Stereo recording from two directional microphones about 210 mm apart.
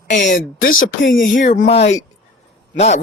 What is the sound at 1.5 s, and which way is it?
Speech, 30° left (ahead or behind).